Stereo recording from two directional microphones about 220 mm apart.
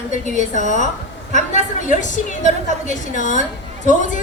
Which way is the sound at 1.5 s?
35° left (ahead or behind).